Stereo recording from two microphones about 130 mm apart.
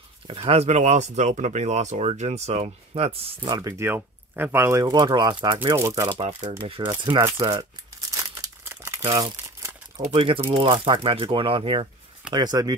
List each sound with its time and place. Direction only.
0.3 s speech: 50° right (ahead or behind)
3.4 s speech: 35° right (ahead or behind)
3.7 s speech: 15° right (ahead or behind)
4.7 s speech: 30° right (ahead or behind)
5.8 s speech: 25° right (ahead or behind)
6.4 s speech: 40° right (ahead or behind)
7.2 s speech: 25° right (ahead or behind)
8.1 s crumpling: 25° right (ahead or behind)
9.9 s speech: 40° right (ahead or behind)